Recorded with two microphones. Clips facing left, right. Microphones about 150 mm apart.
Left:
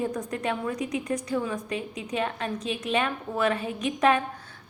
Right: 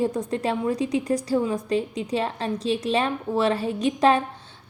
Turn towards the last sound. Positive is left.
turn(degrees=-30)  # may be behind; listen again after turning